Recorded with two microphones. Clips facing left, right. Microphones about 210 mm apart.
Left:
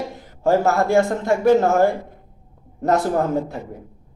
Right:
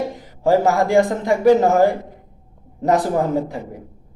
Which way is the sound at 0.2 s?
15° right (ahead or behind).